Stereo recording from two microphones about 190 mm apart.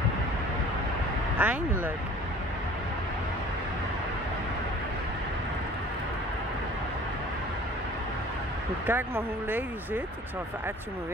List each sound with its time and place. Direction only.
1.4 s speech: 10° right (ahead or behind)
8.8 s speech: 10° right (ahead or behind)